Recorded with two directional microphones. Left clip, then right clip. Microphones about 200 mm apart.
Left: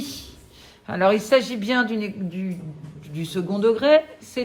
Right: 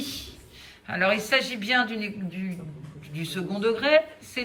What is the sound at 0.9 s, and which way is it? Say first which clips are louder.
Speech: left 5 dB; 15° left (ahead or behind).